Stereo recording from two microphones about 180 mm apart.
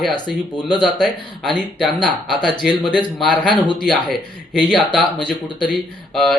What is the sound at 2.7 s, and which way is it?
Speech, 25° left (ahead or behind).